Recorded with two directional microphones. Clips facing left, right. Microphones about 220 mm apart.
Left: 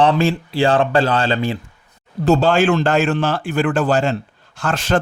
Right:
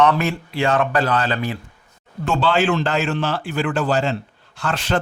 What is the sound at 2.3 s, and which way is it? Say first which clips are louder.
A man's voice: left 5 dB; 45° left (ahead or behind).